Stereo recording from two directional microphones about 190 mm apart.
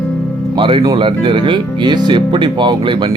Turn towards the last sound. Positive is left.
turn(degrees=-25)  # may be behind; listen again after turning